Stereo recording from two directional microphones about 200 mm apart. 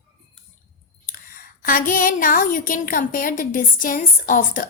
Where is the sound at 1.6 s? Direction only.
45° left (ahead or behind).